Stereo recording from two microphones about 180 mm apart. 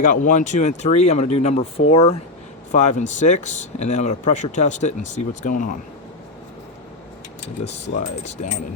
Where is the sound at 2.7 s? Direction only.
45° left (ahead or behind).